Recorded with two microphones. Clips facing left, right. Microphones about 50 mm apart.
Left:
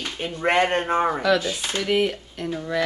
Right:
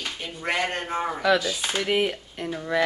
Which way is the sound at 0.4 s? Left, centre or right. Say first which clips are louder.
Left 7 dB; left.